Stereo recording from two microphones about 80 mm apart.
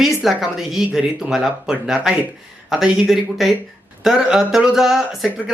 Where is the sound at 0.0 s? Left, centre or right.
Centre.